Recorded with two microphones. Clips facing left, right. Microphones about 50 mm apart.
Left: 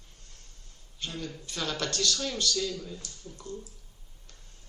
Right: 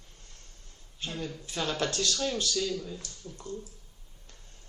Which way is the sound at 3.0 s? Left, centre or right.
Right.